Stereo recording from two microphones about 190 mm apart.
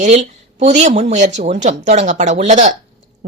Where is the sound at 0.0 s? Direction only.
35° right (ahead or behind).